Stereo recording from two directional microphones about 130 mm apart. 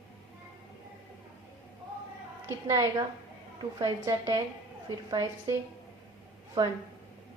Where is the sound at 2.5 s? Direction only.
20° right (ahead or behind).